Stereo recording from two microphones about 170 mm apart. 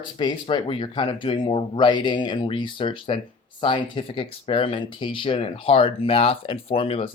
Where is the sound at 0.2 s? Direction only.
25° left (ahead or behind).